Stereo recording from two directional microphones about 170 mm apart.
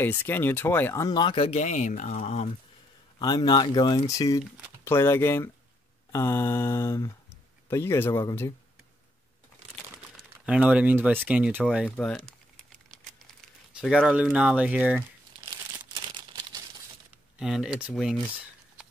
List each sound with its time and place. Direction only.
0.0 s speech: 15° left (ahead or behind); by 2.5 s 40° left (ahead or behind)
3.2 s speech: 25° left (ahead or behind)
4.8 s mantra: 15° left (ahead or behind)
10.4 s speech: 5° right (ahead or behind)
13.7 s speech: 5° right (ahead or behind)
15.9 s crumpling: 25° right (ahead or behind)
17.4 s speech: centre (ahead or behind)